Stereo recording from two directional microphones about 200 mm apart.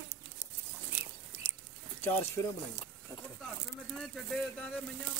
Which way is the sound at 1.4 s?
15° right (ahead or behind).